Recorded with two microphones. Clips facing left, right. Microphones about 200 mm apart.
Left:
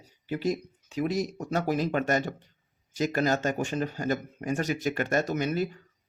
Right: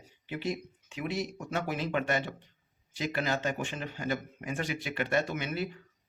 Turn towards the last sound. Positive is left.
turn(degrees=40)  # may be behind; listen again after turning